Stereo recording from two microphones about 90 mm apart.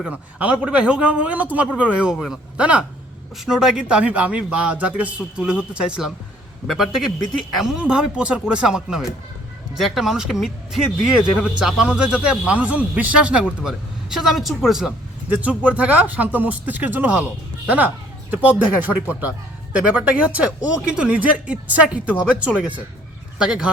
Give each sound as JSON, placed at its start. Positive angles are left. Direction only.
{"t": 0.0, "sound": "speech", "side_deg": -15}
{"t": 2.1, "sound": "a man's voice", "side_deg": 0}
{"t": 2.6, "sound": "a man's voice", "side_deg": -15}
{"t": 15.3, "sound": "speech", "side_deg": -15}